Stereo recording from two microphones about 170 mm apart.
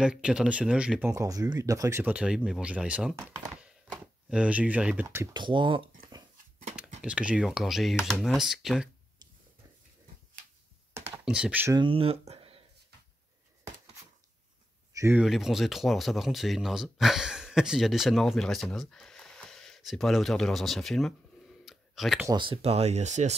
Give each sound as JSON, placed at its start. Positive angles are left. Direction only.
{"t": 0.0, "sound": "speech", "side_deg": -5}
{"t": 1.1, "sound": "speech", "side_deg": -20}
{"t": 5.3, "sound": "speech", "side_deg": -25}
{"t": 7.0, "sound": "speech", "side_deg": -5}
{"t": 11.2, "sound": "speech", "side_deg": -5}
{"t": 11.7, "sound": "speech", "side_deg": -30}
{"t": 15.0, "sound": "speech", "side_deg": -15}
{"t": 15.2, "sound": "speech", "side_deg": 0}
{"t": 21.6, "sound": "clicking", "side_deg": 0}
{"t": 22.2, "sound": "speech", "side_deg": -25}